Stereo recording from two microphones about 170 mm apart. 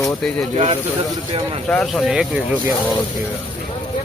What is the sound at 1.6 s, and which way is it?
Speech, 5° left (ahead or behind).